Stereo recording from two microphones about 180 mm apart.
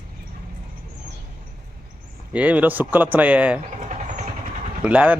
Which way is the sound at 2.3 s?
10° right (ahead or behind).